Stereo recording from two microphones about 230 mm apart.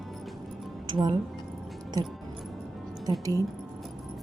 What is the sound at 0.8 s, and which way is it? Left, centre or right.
Speech, centre.